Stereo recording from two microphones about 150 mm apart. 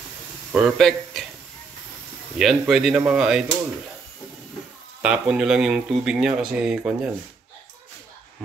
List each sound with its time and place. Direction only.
0.5 s speech: centre (ahead or behind)
2.3 s speech: 5° right (ahead or behind)
5.0 s speech: 5° right (ahead or behind)